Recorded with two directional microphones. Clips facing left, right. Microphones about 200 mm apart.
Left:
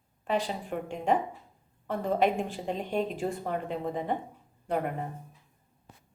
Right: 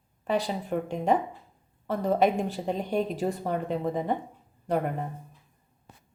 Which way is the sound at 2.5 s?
40° right (ahead or behind).